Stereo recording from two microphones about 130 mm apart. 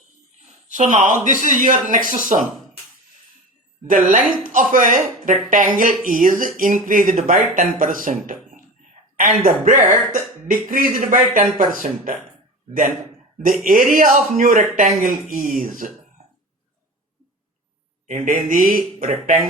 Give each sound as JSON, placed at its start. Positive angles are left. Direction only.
{"t": 0.4, "sound": "speech", "side_deg": -70}
{"t": 3.8, "sound": "speech", "side_deg": -90}
{"t": 13.7, "sound": "speech", "side_deg": -90}
{"t": 18.1, "sound": "speech", "side_deg": -90}